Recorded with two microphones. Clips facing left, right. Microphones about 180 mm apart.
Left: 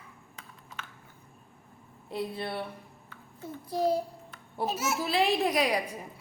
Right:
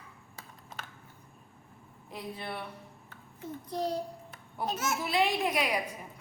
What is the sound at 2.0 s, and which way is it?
Speech, 30° left (ahead or behind).